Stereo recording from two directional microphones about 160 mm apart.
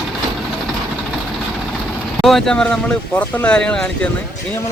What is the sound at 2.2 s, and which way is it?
Speech, centre (ahead or behind).